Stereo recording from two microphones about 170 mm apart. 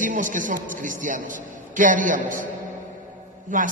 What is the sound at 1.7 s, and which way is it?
Speech, 50° right (ahead or behind).